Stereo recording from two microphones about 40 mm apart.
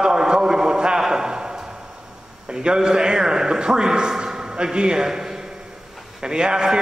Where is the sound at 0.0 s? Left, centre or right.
Centre.